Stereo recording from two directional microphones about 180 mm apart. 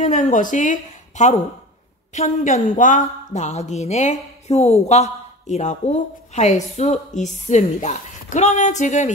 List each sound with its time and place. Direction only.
0.0 s speech: 45° left (ahead or behind)